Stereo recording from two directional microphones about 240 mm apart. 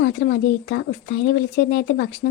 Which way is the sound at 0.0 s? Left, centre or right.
Left.